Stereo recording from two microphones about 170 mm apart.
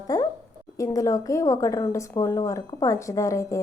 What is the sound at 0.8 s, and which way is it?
A woman's voice, 20° left (ahead or behind).